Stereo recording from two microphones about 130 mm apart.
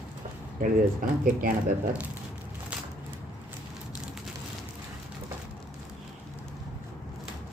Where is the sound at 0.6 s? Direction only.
90° right.